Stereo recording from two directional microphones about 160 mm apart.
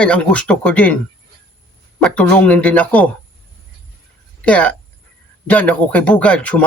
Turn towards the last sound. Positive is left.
turn(degrees=10)  # may be behind; listen again after turning